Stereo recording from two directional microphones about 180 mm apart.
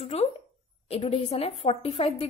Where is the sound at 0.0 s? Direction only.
35° left (ahead or behind).